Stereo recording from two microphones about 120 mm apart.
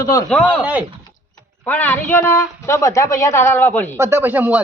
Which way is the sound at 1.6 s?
15° left (ahead or behind).